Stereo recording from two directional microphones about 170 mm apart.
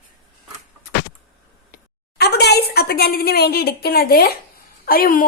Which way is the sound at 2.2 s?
75° left (ahead or behind).